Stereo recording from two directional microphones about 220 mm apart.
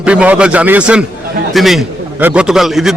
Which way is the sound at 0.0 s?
5° right (ahead or behind).